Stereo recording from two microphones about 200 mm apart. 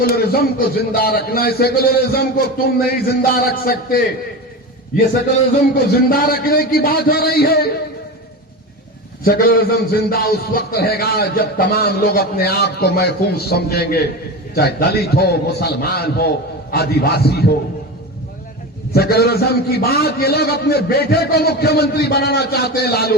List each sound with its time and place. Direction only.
0.0 s a man's voice: 50° left (ahead or behind)
5.7 s a man's voice: 50° left (ahead or behind)
9.2 s a man's voice: 45° left (ahead or behind)
18.9 s a man's voice: 50° left (ahead or behind)